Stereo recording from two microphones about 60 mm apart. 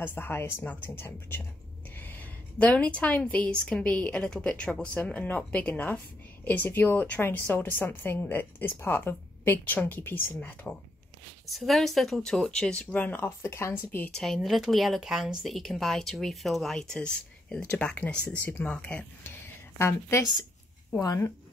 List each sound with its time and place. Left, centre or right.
0.0 s a woman's voice: left
11.5 s speech: centre
12.9 s speech: left
14.1 s speech: centre; by 19.0 s left
19.2 s a sound: left